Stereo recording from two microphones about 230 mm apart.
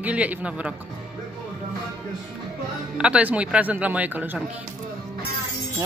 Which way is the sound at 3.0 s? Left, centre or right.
Centre.